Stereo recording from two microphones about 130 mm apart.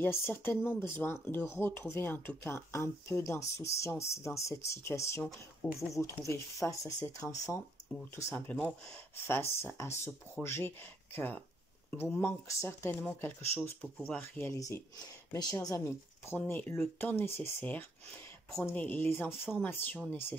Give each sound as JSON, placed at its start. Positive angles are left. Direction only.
{"t": 0.0, "sound": "speech", "side_deg": 15}
{"t": 14.5, "sound": "speech", "side_deg": 20}